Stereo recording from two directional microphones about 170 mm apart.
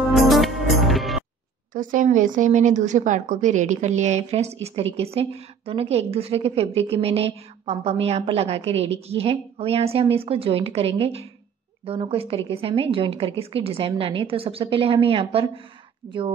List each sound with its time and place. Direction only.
0.0 s music: centre (ahead or behind)
1.7 s a woman's voice: 50° right (ahead or behind); by 16.3 s 30° right (ahead or behind)